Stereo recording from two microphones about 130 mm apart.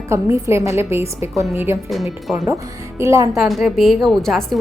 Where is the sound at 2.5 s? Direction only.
20° right (ahead or behind).